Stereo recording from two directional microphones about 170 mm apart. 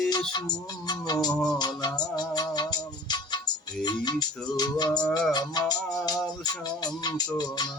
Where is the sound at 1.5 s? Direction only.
25° left (ahead or behind).